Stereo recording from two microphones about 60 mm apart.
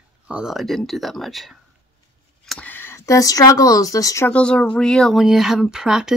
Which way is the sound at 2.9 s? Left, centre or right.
Left.